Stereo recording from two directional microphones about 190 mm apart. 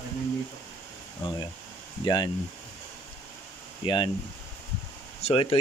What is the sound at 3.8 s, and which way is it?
Speech, 25° left (ahead or behind).